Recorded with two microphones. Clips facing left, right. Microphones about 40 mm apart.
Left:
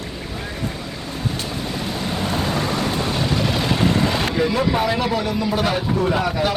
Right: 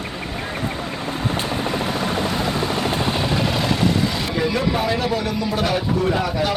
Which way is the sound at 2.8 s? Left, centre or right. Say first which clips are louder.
Right 1 dB; right.